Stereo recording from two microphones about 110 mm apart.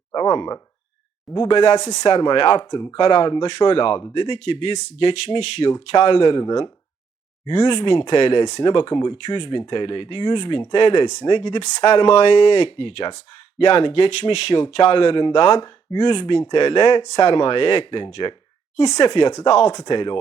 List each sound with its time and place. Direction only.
0.1 s speech: 40° left (ahead or behind)
1.5 s speech: 45° left (ahead or behind)